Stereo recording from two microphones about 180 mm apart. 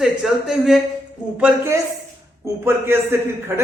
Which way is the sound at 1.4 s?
15° right (ahead or behind).